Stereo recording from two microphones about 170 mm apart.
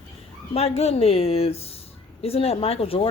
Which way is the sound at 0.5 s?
35° left (ahead or behind).